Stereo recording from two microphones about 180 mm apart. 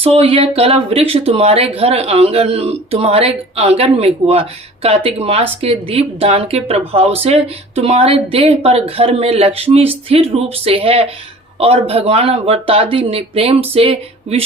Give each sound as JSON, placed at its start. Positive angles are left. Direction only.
{"t": 0.0, "sound": "speech", "side_deg": -30}